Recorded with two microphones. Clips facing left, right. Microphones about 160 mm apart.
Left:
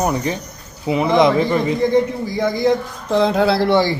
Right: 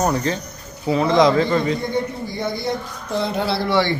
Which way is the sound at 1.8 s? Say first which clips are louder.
Left 7 dB; 90° left.